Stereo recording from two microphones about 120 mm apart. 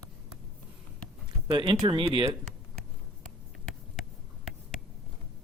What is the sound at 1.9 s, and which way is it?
Speech, 45° right (ahead or behind).